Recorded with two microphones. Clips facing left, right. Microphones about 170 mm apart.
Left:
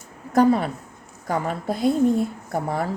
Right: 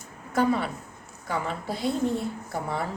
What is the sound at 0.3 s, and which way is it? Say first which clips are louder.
A woman's voice: left 6 dB; 40° left (ahead or behind).